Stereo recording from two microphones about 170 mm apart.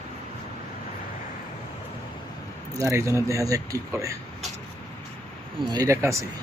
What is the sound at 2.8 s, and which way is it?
Speech, 15° right (ahead or behind).